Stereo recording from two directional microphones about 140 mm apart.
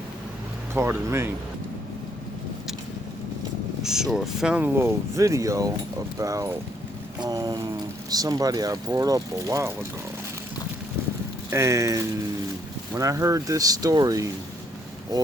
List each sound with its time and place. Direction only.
0.7 s speech: 15° right (ahead or behind)
3.8 s speech: 5° right (ahead or behind); by 9.7 s 20° right (ahead or behind)
11.5 s speech: 20° right (ahead or behind)